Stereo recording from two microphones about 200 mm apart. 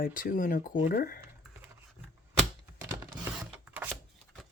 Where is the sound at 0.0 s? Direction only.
45° left (ahead or behind).